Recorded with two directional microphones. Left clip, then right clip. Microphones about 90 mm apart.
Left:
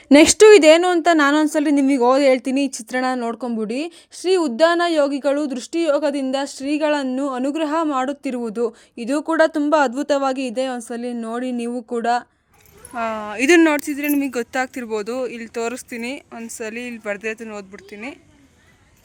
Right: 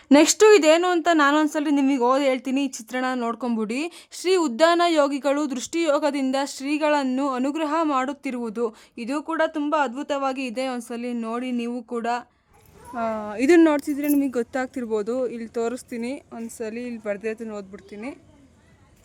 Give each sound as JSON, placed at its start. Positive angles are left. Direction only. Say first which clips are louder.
{"t": 0.1, "sound": "speech", "louder": "left 5 dB", "side_deg": 45}
{"t": 3.6, "sound": "speech", "louder": "left 3 dB", "side_deg": 15}
{"t": 9.2, "sound": "speech", "louder": "left 7 dB", "side_deg": 60}
{"t": 12.9, "sound": "speech", "louder": "left 3 dB", "side_deg": -10}